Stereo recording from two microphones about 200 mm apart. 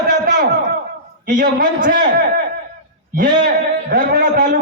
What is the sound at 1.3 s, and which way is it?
A man's voice, 40° right (ahead or behind).